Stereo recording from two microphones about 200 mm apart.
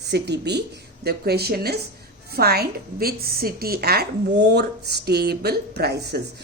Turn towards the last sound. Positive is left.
turn(degrees=-55)  # may be behind; listen again after turning